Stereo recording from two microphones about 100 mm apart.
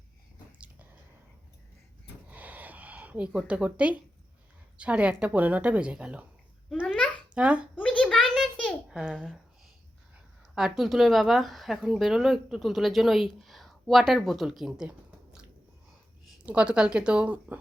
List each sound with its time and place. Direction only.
2.2 s a sound: 15° right (ahead or behind)
4.8 s speech: 10° right (ahead or behind)
6.8 s babbling: 10° left (ahead or behind)
7.3 s a child's voice: 10° right (ahead or behind)
7.8 s a sound: 10° left (ahead or behind)
8.9 s a child's voice: 5° right (ahead or behind)
10.5 s speech: centre (ahead or behind)